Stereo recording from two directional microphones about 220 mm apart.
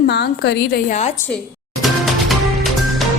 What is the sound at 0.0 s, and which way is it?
Speech, 50° left (ahead or behind).